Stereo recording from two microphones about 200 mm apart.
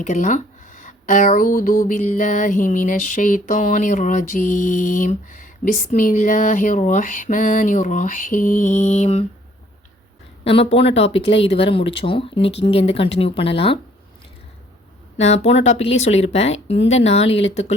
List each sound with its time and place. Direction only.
0.0 s speech: 40° left (ahead or behind)
10.4 s speech: 30° left (ahead or behind)
15.2 s speech: 35° left (ahead or behind)